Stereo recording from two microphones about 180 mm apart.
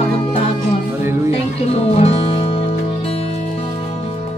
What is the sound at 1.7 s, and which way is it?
Music, 35° left (ahead or behind).